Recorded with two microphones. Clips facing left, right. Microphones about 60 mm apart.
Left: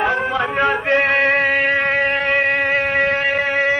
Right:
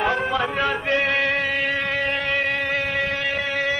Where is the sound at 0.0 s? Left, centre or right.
Centre.